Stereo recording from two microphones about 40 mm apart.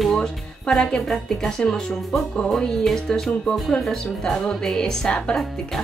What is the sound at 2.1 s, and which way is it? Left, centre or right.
Speech, left.